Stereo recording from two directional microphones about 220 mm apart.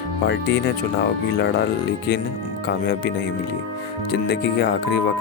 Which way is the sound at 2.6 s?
45° left (ahead or behind).